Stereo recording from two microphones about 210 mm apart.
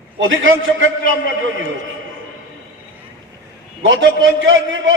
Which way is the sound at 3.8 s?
65° right (ahead or behind).